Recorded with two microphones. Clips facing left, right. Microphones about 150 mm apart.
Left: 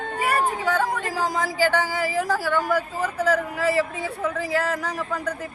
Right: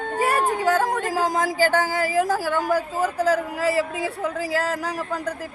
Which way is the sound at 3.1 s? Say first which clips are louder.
Even; 40° right (ahead or behind).